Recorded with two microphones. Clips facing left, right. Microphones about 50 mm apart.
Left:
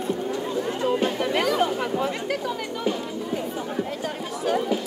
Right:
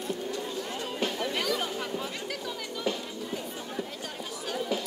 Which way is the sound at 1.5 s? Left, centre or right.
Left.